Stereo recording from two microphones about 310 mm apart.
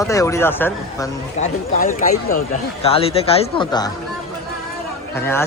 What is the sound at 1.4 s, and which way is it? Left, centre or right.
Speech, left.